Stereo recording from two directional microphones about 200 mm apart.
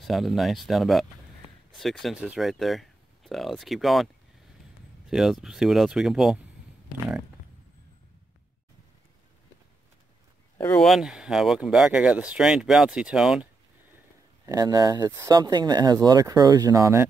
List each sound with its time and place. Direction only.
0.0 s speech: centre (ahead or behind)
10.6 s speech: 5° left (ahead or behind)
14.4 s speech: 20° right (ahead or behind)